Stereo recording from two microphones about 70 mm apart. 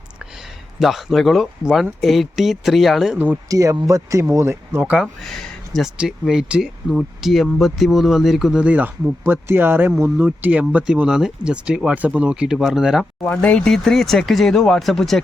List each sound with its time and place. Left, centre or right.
0.8 s speech: centre
3.5 s a man's voice: right
4.4 s speech: right
4.9 s speech: centre
5.8 s speech: centre
8.6 s speech: right
11.0 s speech: centre
13.2 s speech: centre
13.7 s speech: centre